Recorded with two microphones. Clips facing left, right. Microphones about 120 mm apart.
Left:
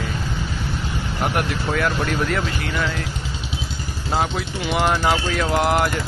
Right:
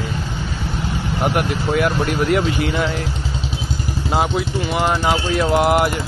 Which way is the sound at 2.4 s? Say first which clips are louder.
Right 5 dB; 25° right (ahead or behind).